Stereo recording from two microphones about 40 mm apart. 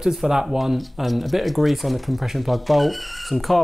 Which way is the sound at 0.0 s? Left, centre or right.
Centre.